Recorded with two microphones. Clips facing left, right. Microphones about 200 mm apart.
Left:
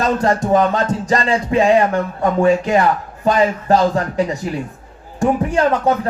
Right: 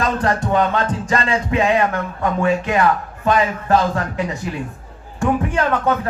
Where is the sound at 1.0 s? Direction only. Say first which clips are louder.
Left 3 dB; 40° left (ahead or behind).